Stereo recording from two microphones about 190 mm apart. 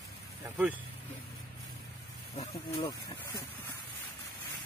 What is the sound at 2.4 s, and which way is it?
Speech, 25° left (ahead or behind).